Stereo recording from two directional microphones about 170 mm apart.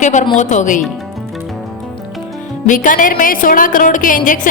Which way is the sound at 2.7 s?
50° left (ahead or behind).